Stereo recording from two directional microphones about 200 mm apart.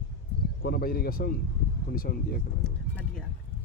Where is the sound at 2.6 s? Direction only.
5° left (ahead or behind).